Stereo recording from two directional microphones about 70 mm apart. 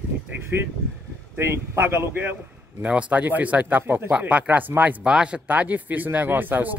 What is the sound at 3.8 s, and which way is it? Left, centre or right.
Speech, right.